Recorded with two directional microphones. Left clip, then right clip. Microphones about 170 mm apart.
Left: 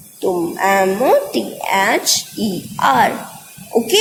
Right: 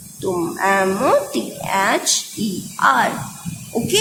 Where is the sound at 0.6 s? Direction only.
20° left (ahead or behind).